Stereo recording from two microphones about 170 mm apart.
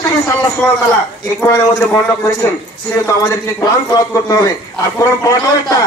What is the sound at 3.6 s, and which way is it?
Speech, 20° left (ahead or behind).